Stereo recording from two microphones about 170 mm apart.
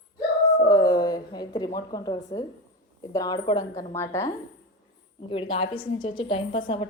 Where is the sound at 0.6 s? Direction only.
20° left (ahead or behind).